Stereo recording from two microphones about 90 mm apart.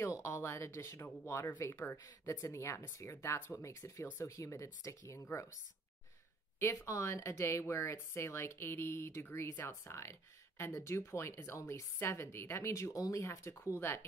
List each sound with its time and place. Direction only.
0.2 s speech: 30° left (ahead or behind)
6.6 s speech: 35° left (ahead or behind)